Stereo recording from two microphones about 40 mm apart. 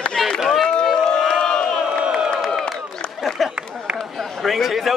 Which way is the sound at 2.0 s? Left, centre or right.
Right.